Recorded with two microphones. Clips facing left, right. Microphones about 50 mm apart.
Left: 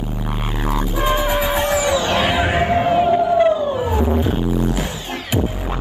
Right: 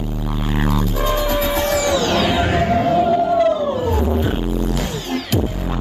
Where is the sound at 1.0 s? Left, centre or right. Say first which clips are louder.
Left 2 dB; left.